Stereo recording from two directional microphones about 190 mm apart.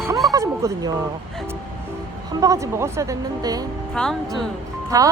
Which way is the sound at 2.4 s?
15° right (ahead or behind).